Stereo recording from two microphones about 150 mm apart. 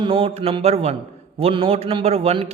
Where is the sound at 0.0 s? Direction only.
40° right (ahead or behind).